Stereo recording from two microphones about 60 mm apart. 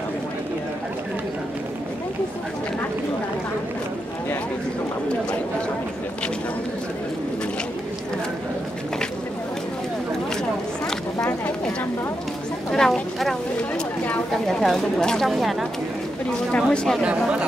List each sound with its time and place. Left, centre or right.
12.7 s a sound: centre
14.3 s speech: centre
16.5 s speech: centre